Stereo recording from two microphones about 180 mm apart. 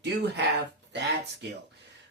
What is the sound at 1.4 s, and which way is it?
Speech, 75° right (ahead or behind).